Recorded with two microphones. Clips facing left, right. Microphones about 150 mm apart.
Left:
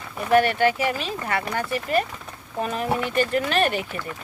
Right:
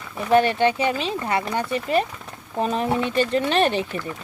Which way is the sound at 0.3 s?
25° right (ahead or behind).